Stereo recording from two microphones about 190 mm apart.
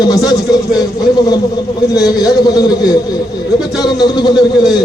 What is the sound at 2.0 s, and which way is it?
A man's voice, 20° left (ahead or behind).